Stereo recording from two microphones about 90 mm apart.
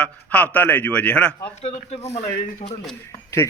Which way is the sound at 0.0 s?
15° left (ahead or behind).